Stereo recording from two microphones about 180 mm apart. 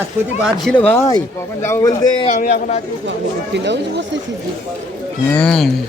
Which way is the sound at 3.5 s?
75° right (ahead or behind).